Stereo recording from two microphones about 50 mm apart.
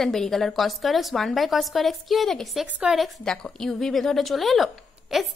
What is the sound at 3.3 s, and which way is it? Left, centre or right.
A woman's voice, centre.